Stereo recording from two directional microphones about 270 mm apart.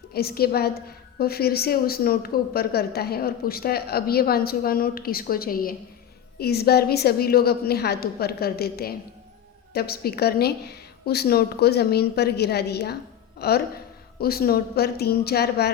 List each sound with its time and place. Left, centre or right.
0.1 s speech: left